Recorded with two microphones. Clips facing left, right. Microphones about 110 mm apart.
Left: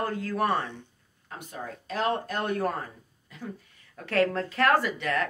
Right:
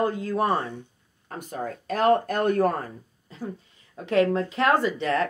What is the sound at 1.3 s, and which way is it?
Speech, 45° right (ahead or behind).